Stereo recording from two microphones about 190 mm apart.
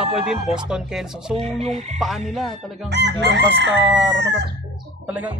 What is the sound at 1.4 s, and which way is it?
Chicken, 35° right (ahead or behind).